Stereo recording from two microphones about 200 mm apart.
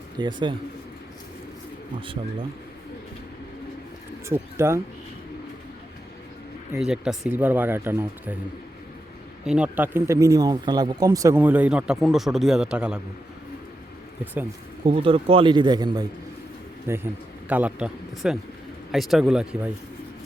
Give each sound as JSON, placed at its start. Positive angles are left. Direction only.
{"t": 0.2, "sound": "a man's voice", "side_deg": -25}
{"t": 4.3, "sound": "speech", "side_deg": -15}
{"t": 6.7, "sound": "speech", "side_deg": -5}
{"t": 9.4, "sound": "speech", "side_deg": -5}
{"t": 14.8, "sound": "a man's voice", "side_deg": -25}